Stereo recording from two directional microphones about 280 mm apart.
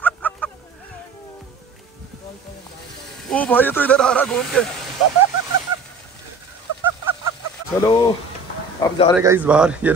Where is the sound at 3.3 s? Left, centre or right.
Centre.